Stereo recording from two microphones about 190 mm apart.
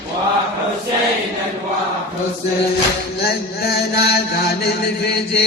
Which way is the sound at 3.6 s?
55° left (ahead or behind).